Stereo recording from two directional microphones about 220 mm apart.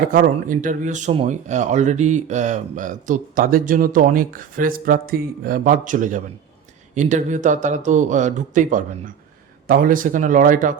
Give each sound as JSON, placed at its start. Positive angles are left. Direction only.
{"t": 0.0, "sound": "speech", "side_deg": -40}